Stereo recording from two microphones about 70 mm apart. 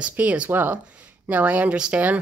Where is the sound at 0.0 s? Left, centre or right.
Right.